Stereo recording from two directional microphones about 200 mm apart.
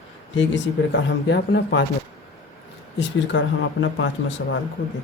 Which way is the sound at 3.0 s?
65° left (ahead or behind).